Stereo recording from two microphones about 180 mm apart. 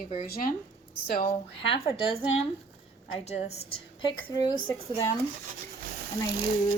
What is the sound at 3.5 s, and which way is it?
Speech, 30° left (ahead or behind).